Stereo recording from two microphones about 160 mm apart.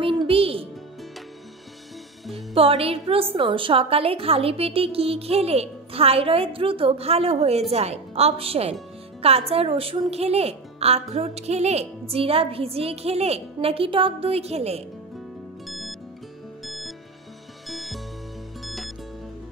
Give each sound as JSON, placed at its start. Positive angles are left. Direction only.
{"t": 0.0, "sound": "a woman's voice", "side_deg": -35}
{"t": 2.3, "sound": "a woman's voice", "side_deg": -35}
{"t": 15.6, "sound": "music", "side_deg": 0}